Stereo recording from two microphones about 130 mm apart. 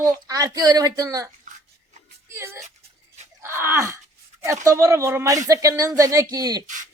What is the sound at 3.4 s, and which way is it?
Groan, 20° right (ahead or behind).